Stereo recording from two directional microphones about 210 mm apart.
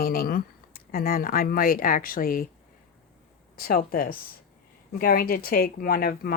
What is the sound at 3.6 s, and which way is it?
Speech, 45° left (ahead or behind).